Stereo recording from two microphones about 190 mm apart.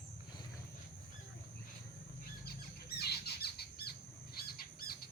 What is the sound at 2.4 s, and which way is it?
Squawk, 55° left (ahead or behind).